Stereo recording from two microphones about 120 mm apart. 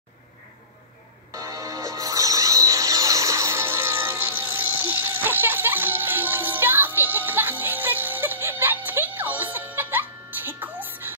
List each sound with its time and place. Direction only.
1.3 s music: 25° right (ahead or behind)